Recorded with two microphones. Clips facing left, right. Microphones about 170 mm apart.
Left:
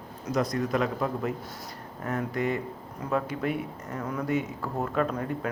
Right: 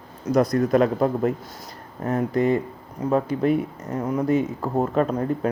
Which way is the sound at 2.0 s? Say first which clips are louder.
Right 8 dB; 35° right (ahead or behind).